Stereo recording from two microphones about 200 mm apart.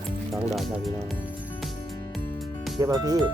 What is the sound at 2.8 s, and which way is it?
Speech, 15° right (ahead or behind).